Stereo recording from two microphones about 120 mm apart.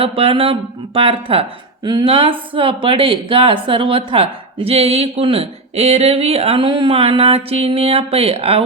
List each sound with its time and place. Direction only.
0.0 s speech: 50° right (ahead or behind)
1.8 s a woman's voice: 35° right (ahead or behind)
2.0 s speech: 45° right (ahead or behind)